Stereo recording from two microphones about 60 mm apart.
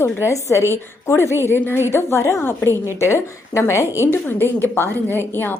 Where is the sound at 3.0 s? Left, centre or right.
Left.